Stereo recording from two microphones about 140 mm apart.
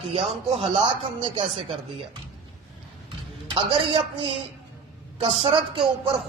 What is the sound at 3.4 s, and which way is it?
Speech, 35° right (ahead or behind).